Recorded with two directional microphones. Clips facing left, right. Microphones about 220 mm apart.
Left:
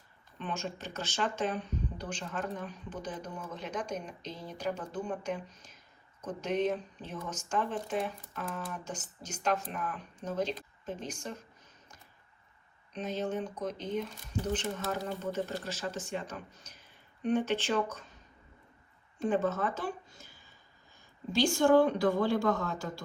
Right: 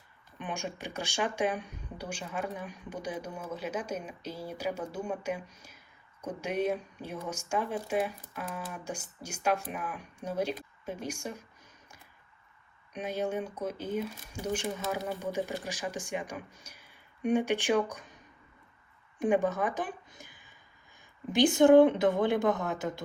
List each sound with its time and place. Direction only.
0.3 s speech: 15° right (ahead or behind)
12.9 s speech: 10° right (ahead or behind)
19.2 s a sound: 15° right (ahead or behind)
21.3 s speech: 20° right (ahead or behind)